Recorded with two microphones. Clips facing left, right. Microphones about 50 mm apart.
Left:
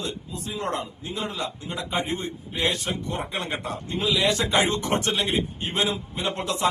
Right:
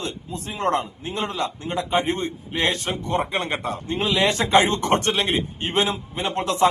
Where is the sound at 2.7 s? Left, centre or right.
Right.